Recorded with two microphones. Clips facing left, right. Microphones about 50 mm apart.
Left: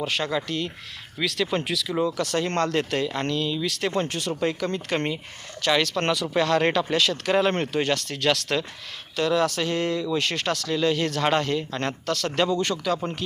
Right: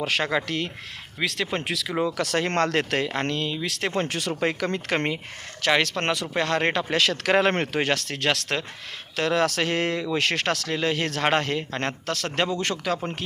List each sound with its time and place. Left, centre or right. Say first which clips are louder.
0.0 s speech: right 2 dB; right
1.2 s speech: left 2 dB; right
1.7 s speech: left 1 dB; right
2.2 s speech: right 1 dB; right
4.0 s speech: right 1 dB; right
4.4 s speech: even; right
5.7 s speech: even; right
6.9 s speech: right 1 dB; right
9.1 s speech: even; right
10.0 s speech: right 1 dB; right